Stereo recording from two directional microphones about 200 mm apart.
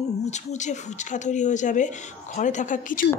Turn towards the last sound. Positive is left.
turn(degrees=40)  # may be behind; listen again after turning